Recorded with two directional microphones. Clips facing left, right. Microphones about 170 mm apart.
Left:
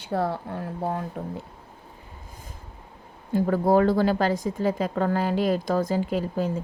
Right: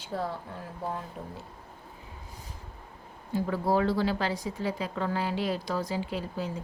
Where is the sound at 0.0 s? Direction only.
65° left (ahead or behind).